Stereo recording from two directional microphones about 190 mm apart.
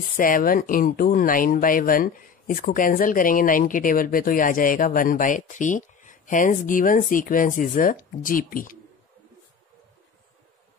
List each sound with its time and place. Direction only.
0.2 s speech: 45° left (ahead or behind)